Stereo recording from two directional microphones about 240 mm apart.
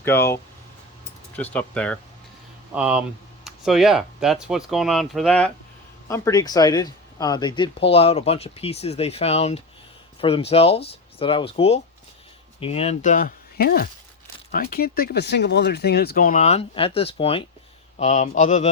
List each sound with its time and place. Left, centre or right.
0.0 s speech: centre
1.4 s speech: centre; by 18.7 s left